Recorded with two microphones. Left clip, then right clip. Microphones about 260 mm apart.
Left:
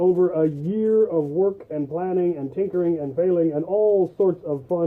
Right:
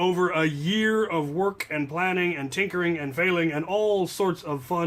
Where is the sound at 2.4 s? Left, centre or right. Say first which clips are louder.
Left 3 dB; right.